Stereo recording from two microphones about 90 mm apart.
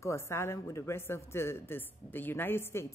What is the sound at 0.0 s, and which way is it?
A woman's voice, 30° left (ahead or behind).